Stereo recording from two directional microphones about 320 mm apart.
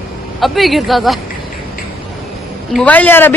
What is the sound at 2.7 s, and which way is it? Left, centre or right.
Speech, centre.